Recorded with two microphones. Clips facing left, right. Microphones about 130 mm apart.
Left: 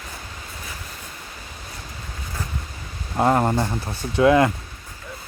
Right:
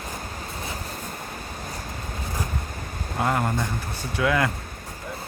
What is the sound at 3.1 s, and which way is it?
Speech, 35° left (ahead or behind).